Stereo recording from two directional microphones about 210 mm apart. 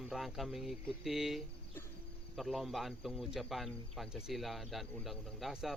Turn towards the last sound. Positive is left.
turn(degrees=0)  # may be behind; listen again after turning